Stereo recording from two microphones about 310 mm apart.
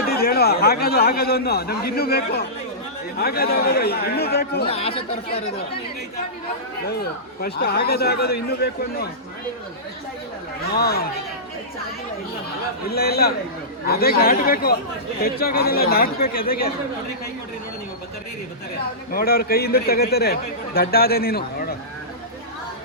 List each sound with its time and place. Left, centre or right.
0.0 s a man's voice: left
4.6 s a man's voice: centre
7.4 s a man's voice: left
10.7 s a man's voice: left
12.9 s a man's voice: left
19.1 s a man's voice: left